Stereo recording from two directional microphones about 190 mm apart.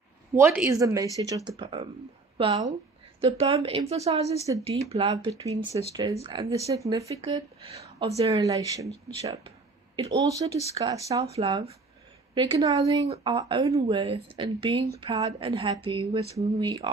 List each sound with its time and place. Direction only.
0.3 s a woman's voice: 10° right (ahead or behind); by 5.1 s 30° right (ahead or behind)
5.1 s speech: 20° right (ahead or behind)
7.2 s speech: 30° right (ahead or behind)
8.4 s speech: 20° right (ahead or behind)
11.3 s a woman's voice: 30° right (ahead or behind)